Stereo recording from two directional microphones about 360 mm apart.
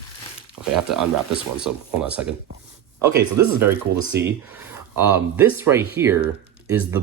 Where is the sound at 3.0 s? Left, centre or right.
Right.